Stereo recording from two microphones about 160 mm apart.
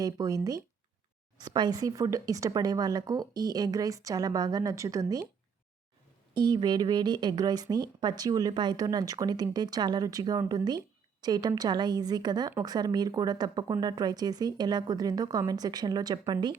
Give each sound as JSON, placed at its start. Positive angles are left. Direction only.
{"t": 0.0, "sound": "speech", "side_deg": -20}
{"t": 6.3, "sound": "speech", "side_deg": -25}